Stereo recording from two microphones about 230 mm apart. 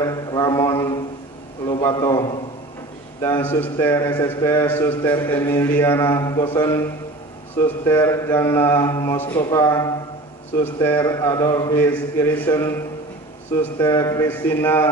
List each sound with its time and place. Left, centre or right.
0.0 s mantra: centre
1.7 s a man's voice: centre
3.2 s mantra: centre